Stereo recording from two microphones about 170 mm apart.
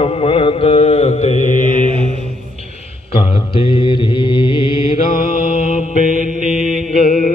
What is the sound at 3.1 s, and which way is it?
Mantra, 30° left (ahead or behind).